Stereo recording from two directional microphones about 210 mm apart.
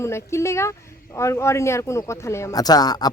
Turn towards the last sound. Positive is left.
turn(degrees=20)  # may be behind; listen again after turning